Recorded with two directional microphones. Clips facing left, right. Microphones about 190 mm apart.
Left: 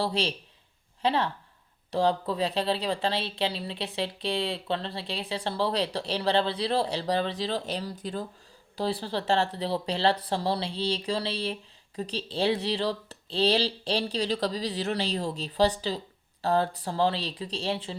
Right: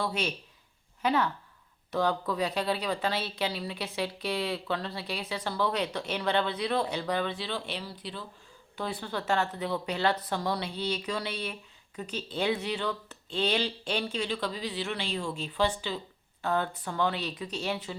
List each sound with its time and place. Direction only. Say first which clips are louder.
0.0 s speech: left 3 dB; 30° left (ahead or behind)
8.7 s speech: left 5 dB; 35° left (ahead or behind)